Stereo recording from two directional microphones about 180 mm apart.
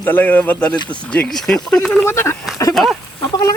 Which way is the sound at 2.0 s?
15° left (ahead or behind).